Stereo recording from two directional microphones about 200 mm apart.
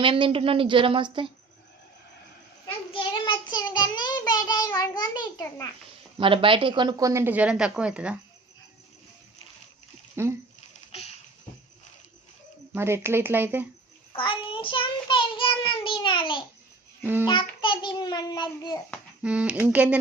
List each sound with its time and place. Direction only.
0.0 s speech: 25° right (ahead or behind)
2.9 s child singing: 25° left (ahead or behind)
6.1 s a woman's voice: 25° right (ahead or behind); by 8.2 s 5° right (ahead or behind)
10.2 s a woman's voice: 10° right (ahead or behind)
12.7 s a woman's voice: 10° right (ahead or behind)
14.1 s child singing: 25° left (ahead or behind)
17.0 s a child's voice: 10° right (ahead or behind)
17.6 s child singing: 25° left (ahead or behind)
19.2 s a woman's voice: 5° right (ahead or behind)